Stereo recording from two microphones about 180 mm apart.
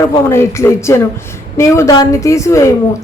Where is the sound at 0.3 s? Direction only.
15° left (ahead or behind).